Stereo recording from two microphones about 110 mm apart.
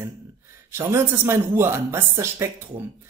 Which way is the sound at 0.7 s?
20° right (ahead or behind).